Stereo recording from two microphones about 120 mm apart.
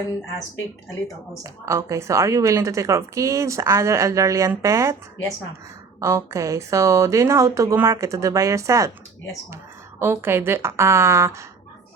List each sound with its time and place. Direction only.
1.5 s a woman's voice: 25° right (ahead or behind)
6.0 s a woman's voice: 25° right (ahead or behind)
10.0 s a woman's voice: 20° right (ahead or behind)